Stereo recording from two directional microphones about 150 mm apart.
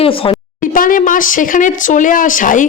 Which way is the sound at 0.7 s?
65° left (ahead or behind).